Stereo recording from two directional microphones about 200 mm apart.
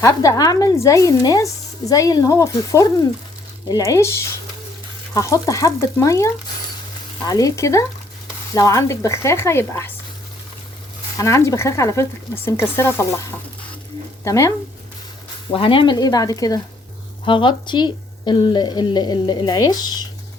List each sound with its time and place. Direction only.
0.0 s speech: 15° left (ahead or behind)
11.2 s speech: 15° left (ahead or behind)
14.3 s speech: 15° left (ahead or behind)
15.4 s a woman's voice: 25° left (ahead or behind)